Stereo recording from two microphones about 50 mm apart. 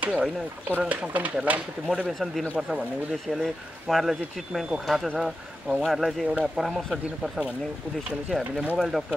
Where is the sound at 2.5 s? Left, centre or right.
Centre.